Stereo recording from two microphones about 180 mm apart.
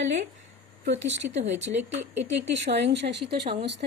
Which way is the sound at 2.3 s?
75° right (ahead or behind).